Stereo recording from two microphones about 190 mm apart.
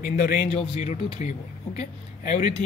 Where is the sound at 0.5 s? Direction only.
35° left (ahead or behind).